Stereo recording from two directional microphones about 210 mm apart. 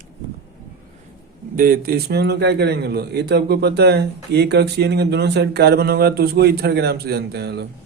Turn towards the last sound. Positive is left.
turn(degrees=-50)  # may be behind; listen again after turning